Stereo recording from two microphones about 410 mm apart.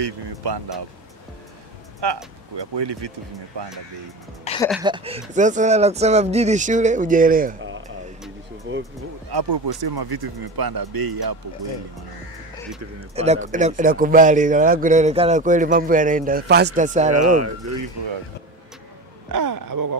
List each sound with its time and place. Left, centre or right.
0.0 s speech: right
2.0 s speech: right
2.5 s speech: right
4.6 s speech: centre; by 8.8 s right
9.3 s speech: right
13.1 s speech: centre
17.2 s speech: right
19.3 s speech: right